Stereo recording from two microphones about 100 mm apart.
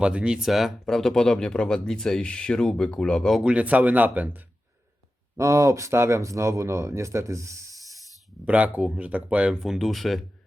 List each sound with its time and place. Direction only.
0.0 s speech: 10° right (ahead or behind)
3.4 s speech: 15° right (ahead or behind)
5.4 s speech: 30° right (ahead or behind)
8.4 s speech: 15° right (ahead or behind)
9.6 s speech: centre (ahead or behind)